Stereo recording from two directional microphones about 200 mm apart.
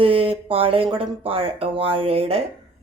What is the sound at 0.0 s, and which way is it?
A woman's voice, 30° right (ahead or behind).